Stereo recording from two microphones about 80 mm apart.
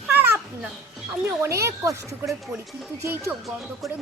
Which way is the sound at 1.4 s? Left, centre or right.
Right.